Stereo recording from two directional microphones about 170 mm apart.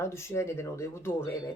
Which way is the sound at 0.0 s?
15° left (ahead or behind).